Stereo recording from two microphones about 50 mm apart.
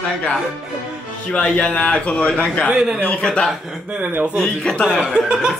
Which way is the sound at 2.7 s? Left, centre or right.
Centre.